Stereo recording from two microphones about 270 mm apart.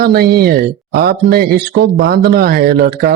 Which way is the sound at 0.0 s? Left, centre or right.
Right.